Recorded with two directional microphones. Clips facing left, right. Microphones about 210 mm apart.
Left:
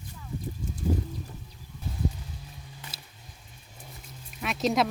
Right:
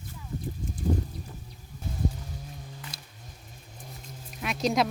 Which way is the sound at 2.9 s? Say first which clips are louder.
Right 1 dB; 5° left (ahead or behind).